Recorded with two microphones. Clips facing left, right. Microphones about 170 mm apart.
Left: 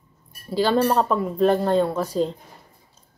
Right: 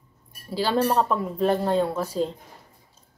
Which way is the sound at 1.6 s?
5° right (ahead or behind).